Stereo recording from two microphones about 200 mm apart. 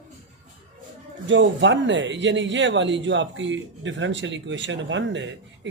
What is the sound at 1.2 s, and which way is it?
Speech, 70° right (ahead or behind).